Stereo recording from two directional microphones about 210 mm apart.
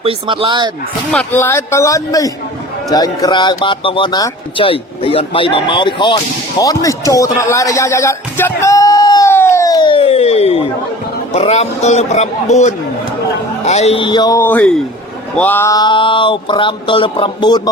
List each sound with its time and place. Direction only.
0.0 s speech: 25° right (ahead or behind)
1.1 s a man's voice: 10° left (ahead or behind); by 12.7 s 35° left (ahead or behind)
13.7 s a sound: 30° left (ahead or behind)